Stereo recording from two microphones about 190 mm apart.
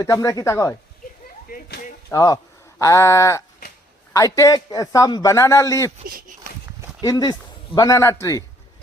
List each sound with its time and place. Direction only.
0.0 s a man's voice: 15° left (ahead or behind)
1.5 s a sound: 55° left (ahead or behind)
2.0 s a man's voice: 20° left (ahead or behind)
6.1 s speech: 45° right (ahead or behind)
7.0 s a man's voice: 20° left (ahead or behind)